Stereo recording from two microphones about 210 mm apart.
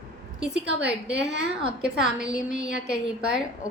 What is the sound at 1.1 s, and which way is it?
Speech, 55° right (ahead or behind).